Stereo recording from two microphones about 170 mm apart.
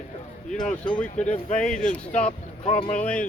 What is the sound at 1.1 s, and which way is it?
Speech, 45° left (ahead or behind).